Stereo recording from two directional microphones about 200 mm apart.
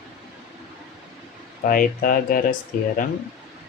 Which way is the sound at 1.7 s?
45° left (ahead or behind).